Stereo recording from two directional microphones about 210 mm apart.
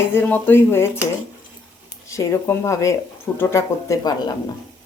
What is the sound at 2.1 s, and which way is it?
Speech, 15° left (ahead or behind).